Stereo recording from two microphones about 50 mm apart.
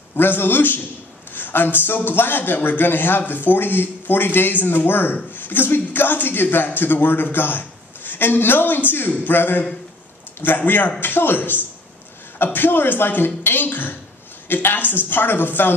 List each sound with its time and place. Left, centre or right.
0.1 s a man's voice: left